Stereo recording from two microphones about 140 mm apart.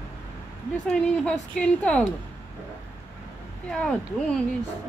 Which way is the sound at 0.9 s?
5° left (ahead or behind).